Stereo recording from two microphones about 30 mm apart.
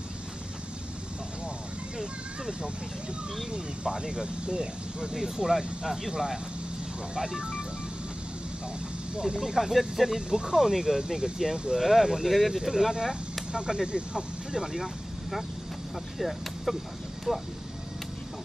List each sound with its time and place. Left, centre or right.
2.0 s speech: right
9.4 s speech: centre
10.3 s speech: right
10.6 s speech: centre
11.0 s speech: right
12.9 s speech: right
16.2 s speech: centre